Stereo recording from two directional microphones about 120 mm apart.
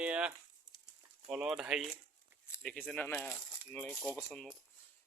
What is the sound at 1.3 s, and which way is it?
Speech, 5° right (ahead or behind).